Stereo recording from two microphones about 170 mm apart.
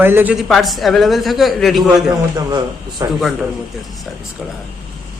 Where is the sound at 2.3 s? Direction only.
25° right (ahead or behind).